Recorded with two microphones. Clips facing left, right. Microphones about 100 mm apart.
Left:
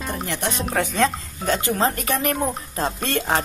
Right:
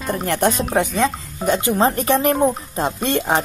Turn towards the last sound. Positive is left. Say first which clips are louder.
# right 3 dB
turn(degrees=-20)  # may be behind; listen again after turning